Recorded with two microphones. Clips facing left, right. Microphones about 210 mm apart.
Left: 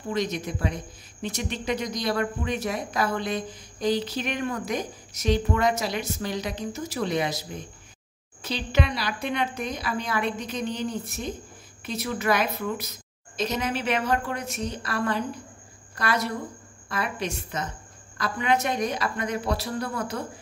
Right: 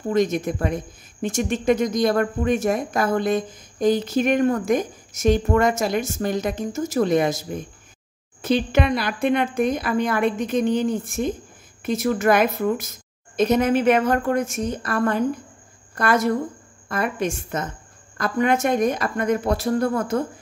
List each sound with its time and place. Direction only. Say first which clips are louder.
0.1 s speech: right 7 dB; 50° right (ahead or behind)